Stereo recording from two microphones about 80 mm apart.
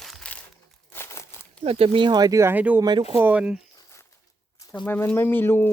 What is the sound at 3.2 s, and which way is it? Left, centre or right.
Speech, centre.